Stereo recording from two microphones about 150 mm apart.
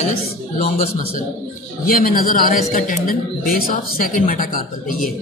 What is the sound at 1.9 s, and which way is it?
A woman's voice, 70° left (ahead or behind).